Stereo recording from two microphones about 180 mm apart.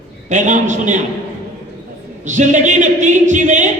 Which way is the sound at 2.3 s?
40° right (ahead or behind).